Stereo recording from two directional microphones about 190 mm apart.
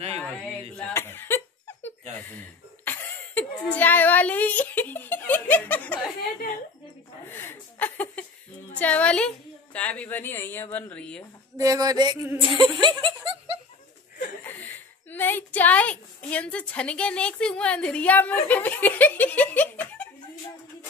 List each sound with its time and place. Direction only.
0.7 s a sound: 10° left (ahead or behind)
7.2 s chuckle: 10° left (ahead or behind)
8.7 s a woman's voice: 5° left (ahead or behind)
11.5 s a sound: 15° right (ahead or behind)
12.5 s speech: 25° right (ahead or behind)
14.4 s a woman's voice: 10° left (ahead or behind)